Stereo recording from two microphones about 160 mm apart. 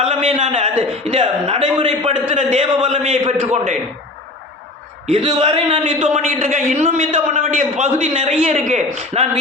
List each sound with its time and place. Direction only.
0.0 s a sound: 40° right (ahead or behind)
0.8 s a man's voice: 35° right (ahead or behind)
5.1 s a man's voice: 35° right (ahead or behind)